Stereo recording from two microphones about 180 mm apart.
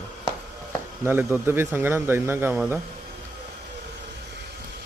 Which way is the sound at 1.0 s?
10° right (ahead or behind).